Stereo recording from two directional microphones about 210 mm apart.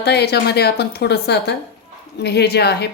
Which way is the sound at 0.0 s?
50° left (ahead or behind).